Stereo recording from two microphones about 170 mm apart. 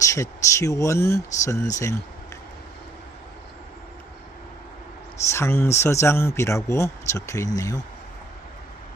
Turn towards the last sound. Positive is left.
turn(degrees=20)  # may be behind; listen again after turning